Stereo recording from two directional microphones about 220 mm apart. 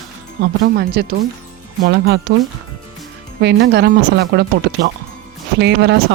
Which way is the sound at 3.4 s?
50° right (ahead or behind).